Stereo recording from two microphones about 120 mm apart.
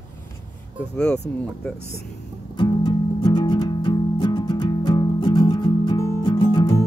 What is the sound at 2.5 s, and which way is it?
Music, 40° left (ahead or behind).